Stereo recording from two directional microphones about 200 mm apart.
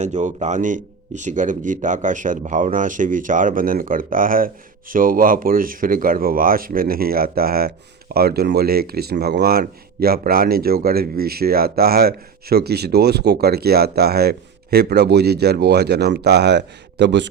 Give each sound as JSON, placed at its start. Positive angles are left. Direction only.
{"t": 0.0, "sound": "speech", "side_deg": -35}